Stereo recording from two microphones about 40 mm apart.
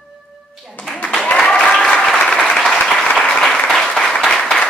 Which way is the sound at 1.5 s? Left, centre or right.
Centre.